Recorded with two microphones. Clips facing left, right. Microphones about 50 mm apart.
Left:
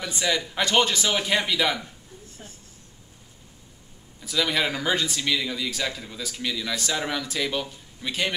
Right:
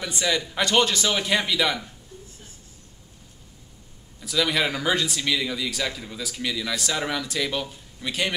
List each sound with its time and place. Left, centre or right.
0.0 s speech: centre
4.2 s speech: centre